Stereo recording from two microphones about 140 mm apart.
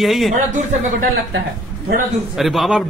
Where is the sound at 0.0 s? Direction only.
Centre (ahead or behind).